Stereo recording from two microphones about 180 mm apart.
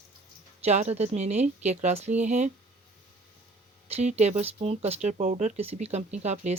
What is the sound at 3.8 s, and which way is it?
Speech, 35° right (ahead or behind).